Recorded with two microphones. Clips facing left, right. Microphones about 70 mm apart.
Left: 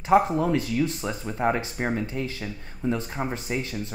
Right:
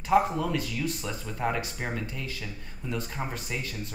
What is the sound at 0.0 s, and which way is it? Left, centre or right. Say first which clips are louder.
Speech: left 4 dB; left.